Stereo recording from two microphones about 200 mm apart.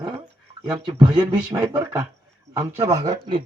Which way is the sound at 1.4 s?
5° right (ahead or behind).